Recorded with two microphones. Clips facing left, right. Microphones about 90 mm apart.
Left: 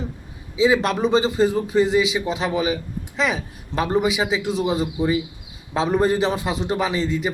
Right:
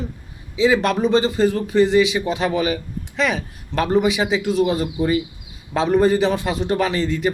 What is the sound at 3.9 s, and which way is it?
A man's voice, 5° left (ahead or behind).